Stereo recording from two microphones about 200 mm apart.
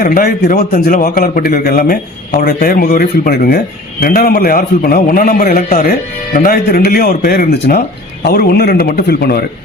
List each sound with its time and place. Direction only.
0.0 s a man's voice: 45° left (ahead or behind)